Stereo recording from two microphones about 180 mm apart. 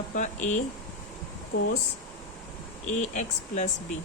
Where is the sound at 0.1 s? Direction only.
40° left (ahead or behind).